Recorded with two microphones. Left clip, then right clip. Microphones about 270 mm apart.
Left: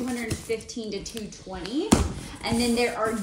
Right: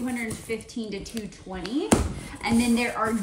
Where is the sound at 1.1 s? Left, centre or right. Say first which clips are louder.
Even; centre.